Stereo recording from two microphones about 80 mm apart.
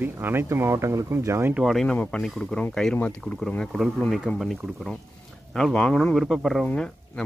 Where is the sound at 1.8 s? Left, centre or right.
Centre.